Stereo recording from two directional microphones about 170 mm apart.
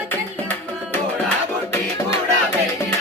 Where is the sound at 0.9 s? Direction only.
10° left (ahead or behind).